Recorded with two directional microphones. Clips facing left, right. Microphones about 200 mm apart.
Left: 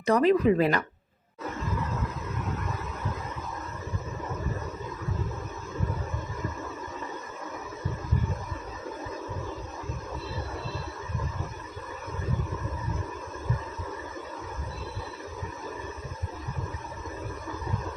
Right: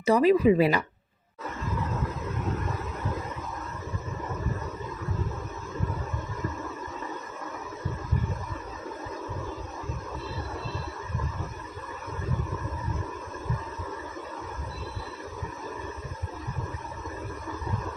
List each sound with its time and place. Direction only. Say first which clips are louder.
0.0 s speech: right 1 dB; 5° right (ahead or behind)